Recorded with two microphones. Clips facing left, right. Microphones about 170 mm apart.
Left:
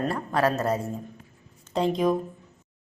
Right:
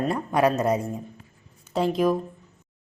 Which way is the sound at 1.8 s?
5° right (ahead or behind).